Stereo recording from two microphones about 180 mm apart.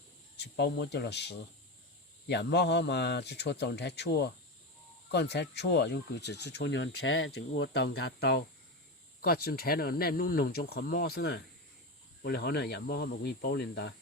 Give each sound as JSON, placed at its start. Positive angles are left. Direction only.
{"t": 0.3, "sound": "speech", "side_deg": 70}